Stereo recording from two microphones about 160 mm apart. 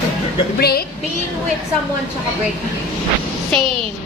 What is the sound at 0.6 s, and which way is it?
Speech, 75° left (ahead or behind).